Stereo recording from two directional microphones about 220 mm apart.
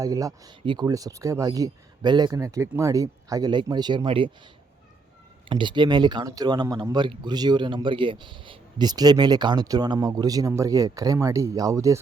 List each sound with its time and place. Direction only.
0.0 s speech: 15° right (ahead or behind)
5.5 s speech: 20° right (ahead or behind)